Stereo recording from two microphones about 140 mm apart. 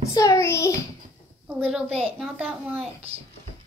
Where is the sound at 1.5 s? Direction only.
10° right (ahead or behind).